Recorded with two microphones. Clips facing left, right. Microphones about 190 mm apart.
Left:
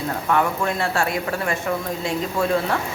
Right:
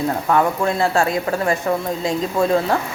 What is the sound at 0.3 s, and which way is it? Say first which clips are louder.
Speech: right 3 dB; 35° right (ahead or behind).